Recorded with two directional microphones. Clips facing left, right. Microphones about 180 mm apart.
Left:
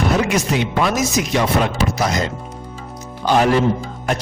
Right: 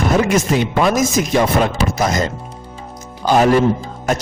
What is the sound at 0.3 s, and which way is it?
A man's voice, 45° right (ahead or behind).